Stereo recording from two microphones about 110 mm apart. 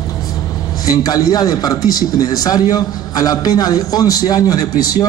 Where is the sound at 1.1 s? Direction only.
35° left (ahead or behind).